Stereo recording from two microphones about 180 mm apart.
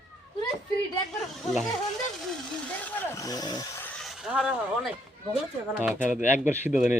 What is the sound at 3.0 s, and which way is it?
Speech, 20° left (ahead or behind).